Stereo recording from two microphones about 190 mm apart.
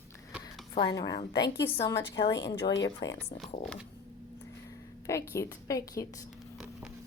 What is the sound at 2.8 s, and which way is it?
Speech, 20° left (ahead or behind).